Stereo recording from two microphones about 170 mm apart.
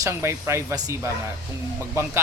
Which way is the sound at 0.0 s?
15° right (ahead or behind).